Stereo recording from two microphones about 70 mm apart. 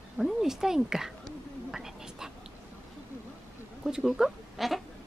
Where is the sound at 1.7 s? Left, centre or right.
Centre.